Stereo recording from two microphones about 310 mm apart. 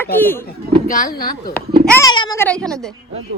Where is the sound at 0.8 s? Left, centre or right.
Left.